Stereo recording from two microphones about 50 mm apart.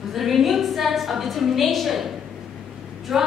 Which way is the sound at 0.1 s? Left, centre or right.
Centre.